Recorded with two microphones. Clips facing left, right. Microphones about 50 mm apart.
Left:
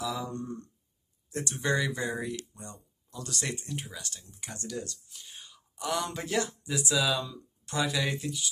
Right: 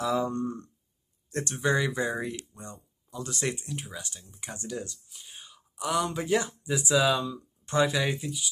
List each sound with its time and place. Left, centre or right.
0.0 s speech: right
1.7 s speech: centre
3.5 s speech: centre
3.9 s speech: centre
4.9 s speech: centre
6.2 s speech: centre
8.2 s speech: centre